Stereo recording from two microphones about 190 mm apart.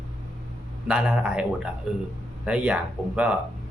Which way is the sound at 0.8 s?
5° right (ahead or behind).